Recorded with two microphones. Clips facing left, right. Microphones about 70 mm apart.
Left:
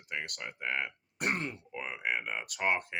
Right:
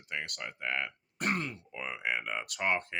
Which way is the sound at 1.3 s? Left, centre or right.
Left.